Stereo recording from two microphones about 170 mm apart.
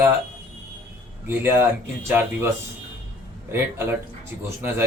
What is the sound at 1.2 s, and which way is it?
Speech, 15° right (ahead or behind).